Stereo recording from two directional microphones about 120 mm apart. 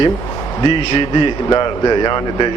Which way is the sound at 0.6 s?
45° left (ahead or behind).